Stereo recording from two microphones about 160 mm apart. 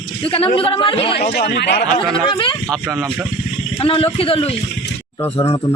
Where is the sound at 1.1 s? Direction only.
90° left.